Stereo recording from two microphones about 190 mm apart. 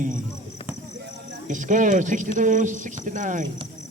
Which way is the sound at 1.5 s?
40° right (ahead or behind).